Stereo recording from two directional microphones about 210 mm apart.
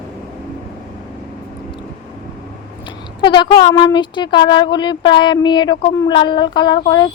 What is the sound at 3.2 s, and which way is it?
Speech, 20° left (ahead or behind).